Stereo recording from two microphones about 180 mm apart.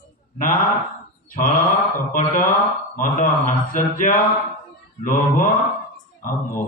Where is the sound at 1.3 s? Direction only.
50° left (ahead or behind).